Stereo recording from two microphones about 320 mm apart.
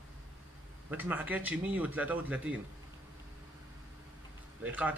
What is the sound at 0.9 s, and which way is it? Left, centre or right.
Speech, centre.